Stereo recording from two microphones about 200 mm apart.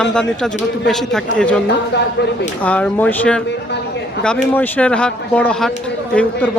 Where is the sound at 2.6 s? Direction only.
5° left (ahead or behind).